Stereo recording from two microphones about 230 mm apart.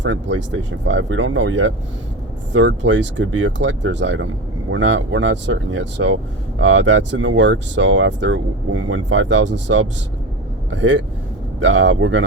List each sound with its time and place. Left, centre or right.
0.0 s speech: right